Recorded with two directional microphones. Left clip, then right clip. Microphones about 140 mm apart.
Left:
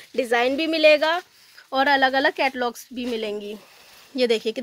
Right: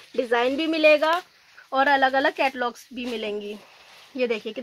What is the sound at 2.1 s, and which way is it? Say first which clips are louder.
Speech: left 1 dB; 65° left (ahead or behind).